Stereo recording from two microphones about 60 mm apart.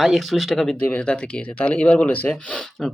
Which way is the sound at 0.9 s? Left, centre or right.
Centre.